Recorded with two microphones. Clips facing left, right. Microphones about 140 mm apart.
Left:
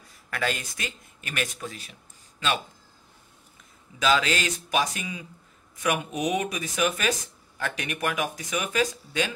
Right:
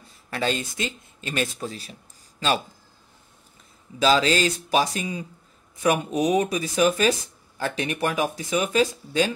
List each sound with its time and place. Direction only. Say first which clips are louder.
0.0 s speech: right 3 dB; 30° right (ahead or behind)
4.0 s speech: right 4 dB; 30° right (ahead or behind)